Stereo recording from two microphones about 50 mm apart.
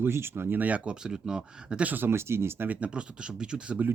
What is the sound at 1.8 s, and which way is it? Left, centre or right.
Speech, right.